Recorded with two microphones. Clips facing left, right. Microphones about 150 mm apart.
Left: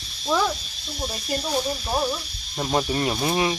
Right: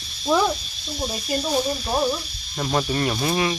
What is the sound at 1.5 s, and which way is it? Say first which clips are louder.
Speech: right 2 dB; 5° right (ahead or behind).